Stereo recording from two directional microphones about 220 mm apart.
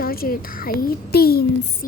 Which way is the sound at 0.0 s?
40° left (ahead or behind).